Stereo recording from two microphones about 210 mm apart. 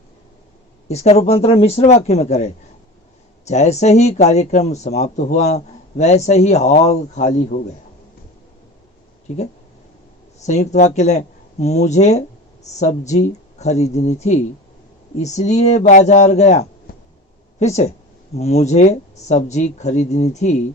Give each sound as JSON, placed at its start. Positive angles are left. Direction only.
{"t": 0.9, "sound": "speech", "side_deg": 30}
{"t": 10.4, "sound": "speech", "side_deg": 35}